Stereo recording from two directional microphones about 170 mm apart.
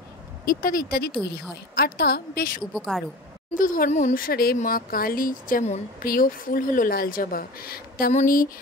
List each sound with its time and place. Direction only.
0.5 s speech: 55° left (ahead or behind)
2.7 s speech: centre (ahead or behind)
3.5 s speech: 55° left (ahead or behind)
8.1 s speech: 50° left (ahead or behind)